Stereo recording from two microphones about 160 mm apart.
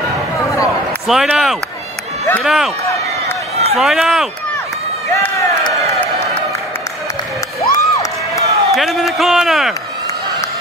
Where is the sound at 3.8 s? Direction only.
Centre (ahead or behind).